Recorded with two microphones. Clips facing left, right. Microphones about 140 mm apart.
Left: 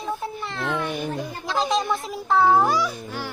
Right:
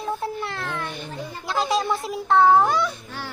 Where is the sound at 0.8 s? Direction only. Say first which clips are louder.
Left 5 dB; 10° left (ahead or behind).